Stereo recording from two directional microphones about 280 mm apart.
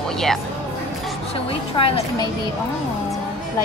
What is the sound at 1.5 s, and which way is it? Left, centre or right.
Speech, centre.